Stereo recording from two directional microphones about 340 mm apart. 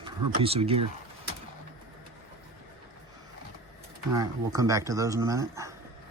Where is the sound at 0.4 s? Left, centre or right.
Centre.